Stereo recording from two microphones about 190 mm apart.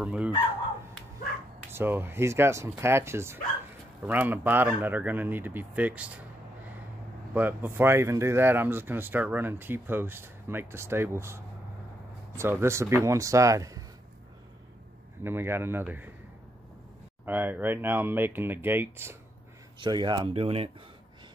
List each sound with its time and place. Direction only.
0.0 s speech: 5° right (ahead or behind)
1.7 s speech: 10° right (ahead or behind)
7.3 s speech: 10° right (ahead or behind)
15.2 s speech: 10° right (ahead or behind)
17.2 s speech: 10° right (ahead or behind)
19.8 s speech: 25° right (ahead or behind)